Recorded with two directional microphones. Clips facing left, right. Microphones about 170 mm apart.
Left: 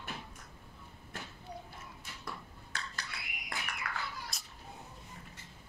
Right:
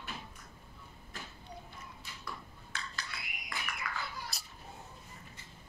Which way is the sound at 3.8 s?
65° left (ahead or behind).